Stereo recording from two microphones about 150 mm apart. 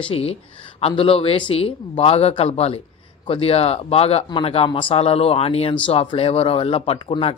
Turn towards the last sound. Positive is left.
turn(degrees=40)  # may be behind; listen again after turning